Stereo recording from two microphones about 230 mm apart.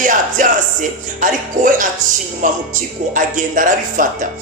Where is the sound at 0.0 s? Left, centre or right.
Right.